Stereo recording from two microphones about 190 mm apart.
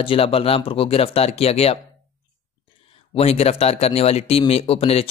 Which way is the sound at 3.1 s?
30° left (ahead or behind).